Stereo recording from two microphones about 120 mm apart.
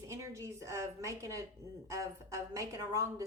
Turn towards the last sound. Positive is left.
turn(degrees=-30)  # may be behind; listen again after turning